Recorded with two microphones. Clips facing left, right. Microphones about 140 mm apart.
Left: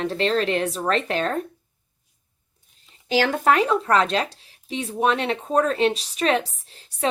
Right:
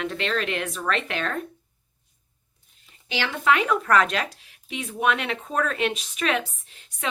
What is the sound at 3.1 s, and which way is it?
Speech, 40° left (ahead or behind).